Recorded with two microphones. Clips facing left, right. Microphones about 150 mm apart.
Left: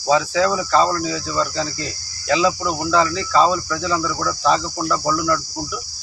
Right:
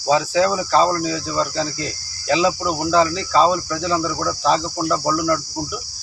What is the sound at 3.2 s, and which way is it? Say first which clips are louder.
Cricket: even; 30° right (ahead or behind).